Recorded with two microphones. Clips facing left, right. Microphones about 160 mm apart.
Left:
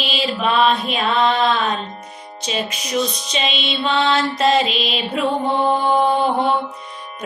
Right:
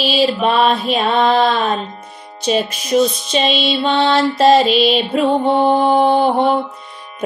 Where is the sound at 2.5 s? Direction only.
45° right (ahead or behind).